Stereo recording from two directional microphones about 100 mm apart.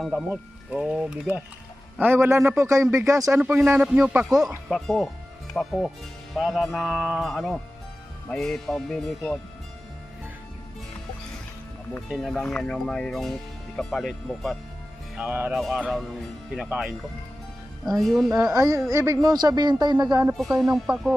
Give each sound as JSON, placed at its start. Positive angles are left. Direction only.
{"t": 0.0, "sound": "speech", "side_deg": 0}
{"t": 3.8, "sound": "speech", "side_deg": -10}
{"t": 4.7, "sound": "speech", "side_deg": 5}
{"t": 12.0, "sound": "speech", "side_deg": 0}
{"t": 15.2, "sound": "speech", "side_deg": -15}
{"t": 15.5, "sound": "speech", "side_deg": 0}
{"t": 17.9, "sound": "speech", "side_deg": 0}
{"t": 18.5, "sound": "speech", "side_deg": -30}
{"t": 19.3, "sound": "speech", "side_deg": -45}
{"t": 20.3, "sound": "speech", "side_deg": 0}